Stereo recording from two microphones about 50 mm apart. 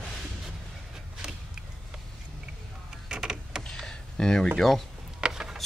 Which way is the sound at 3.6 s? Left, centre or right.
Centre.